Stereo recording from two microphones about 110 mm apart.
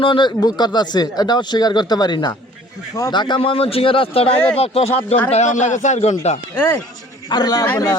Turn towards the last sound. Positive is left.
turn(degrees=35)  # may be behind; listen again after turning